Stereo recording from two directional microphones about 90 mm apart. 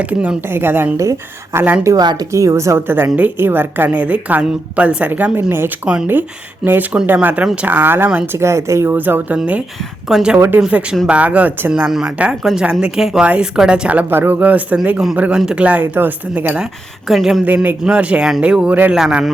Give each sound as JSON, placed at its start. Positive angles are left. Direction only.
{"t": 0.0, "sound": "a woman's voice", "side_deg": -15}
{"t": 2.0, "sound": "speech", "side_deg": -50}
{"t": 2.3, "sound": "a woman's voice", "side_deg": -35}
{"t": 5.8, "sound": "a woman's voice", "side_deg": -10}
{"t": 10.1, "sound": "a man's voice", "side_deg": -5}
{"t": 10.3, "sound": "a woman's voice", "side_deg": -25}
{"t": 11.7, "sound": "speech", "side_deg": -5}
{"t": 17.1, "sound": "a man's voice", "side_deg": 0}
{"t": 17.4, "sound": "a woman's voice", "side_deg": -20}